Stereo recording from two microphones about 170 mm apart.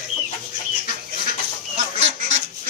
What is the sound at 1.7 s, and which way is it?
Goose, 45° right (ahead or behind).